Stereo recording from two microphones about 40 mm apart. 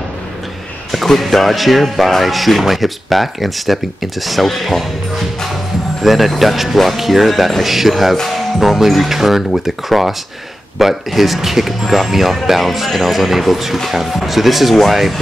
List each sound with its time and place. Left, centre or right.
0.9 s speech: centre
6.0 s speech: centre